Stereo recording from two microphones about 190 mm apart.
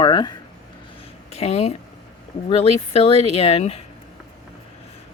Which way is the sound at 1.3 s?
35° left (ahead or behind).